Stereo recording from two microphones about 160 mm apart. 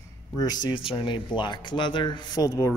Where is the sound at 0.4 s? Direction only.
25° left (ahead or behind).